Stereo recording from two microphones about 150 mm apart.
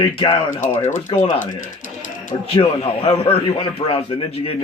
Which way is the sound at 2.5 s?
35° left (ahead or behind).